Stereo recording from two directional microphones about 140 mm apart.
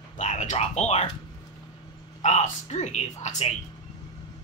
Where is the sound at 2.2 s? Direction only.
55° left (ahead or behind).